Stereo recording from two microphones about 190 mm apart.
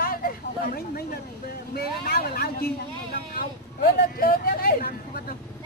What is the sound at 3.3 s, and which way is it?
Vehicle, 50° left (ahead or behind).